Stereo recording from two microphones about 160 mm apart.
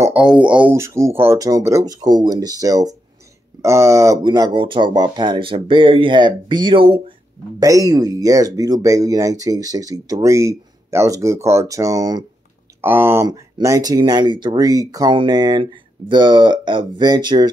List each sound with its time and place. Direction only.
0.0 s speech: 10° right (ahead or behind); by 7.2 s 35° right (ahead or behind)
7.6 s speech: 20° right (ahead or behind)